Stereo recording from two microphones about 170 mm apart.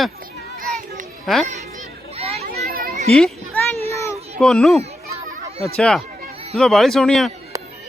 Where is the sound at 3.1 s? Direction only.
5° left (ahead or behind).